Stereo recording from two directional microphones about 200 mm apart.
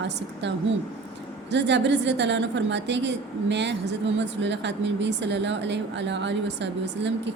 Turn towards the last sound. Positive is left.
turn(degrees=-60)  # may be behind; listen again after turning